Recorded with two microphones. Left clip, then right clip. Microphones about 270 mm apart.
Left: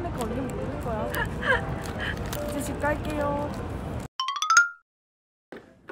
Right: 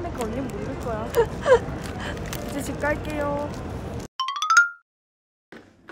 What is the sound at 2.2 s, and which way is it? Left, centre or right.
Speech, centre.